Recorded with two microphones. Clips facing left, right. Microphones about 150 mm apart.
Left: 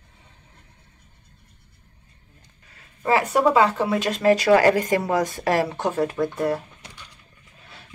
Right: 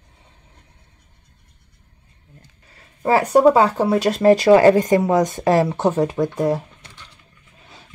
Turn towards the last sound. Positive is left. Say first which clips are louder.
# right 4 dB
turn(degrees=-20)  # may be behind; listen again after turning